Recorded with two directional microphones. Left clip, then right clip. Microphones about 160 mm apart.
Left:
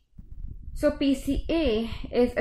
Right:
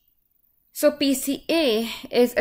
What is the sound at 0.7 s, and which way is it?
A woman's voice, 20° right (ahead or behind).